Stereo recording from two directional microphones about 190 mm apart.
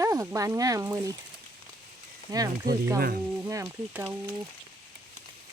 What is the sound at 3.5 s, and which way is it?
Speech, 15° right (ahead or behind).